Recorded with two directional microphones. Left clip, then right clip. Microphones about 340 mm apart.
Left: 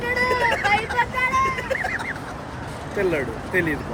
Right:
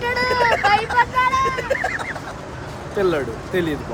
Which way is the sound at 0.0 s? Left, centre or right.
Right.